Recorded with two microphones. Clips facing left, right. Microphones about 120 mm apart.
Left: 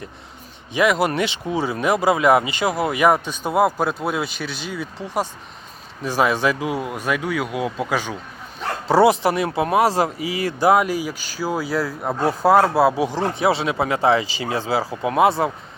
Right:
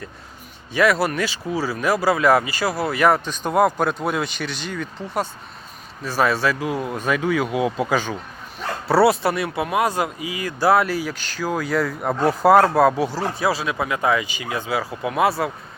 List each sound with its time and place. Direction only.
0.7 s speech: 15° left (ahead or behind)
8.9 s speech: 20° left (ahead or behind)
10.6 s speech: 15° left (ahead or behind)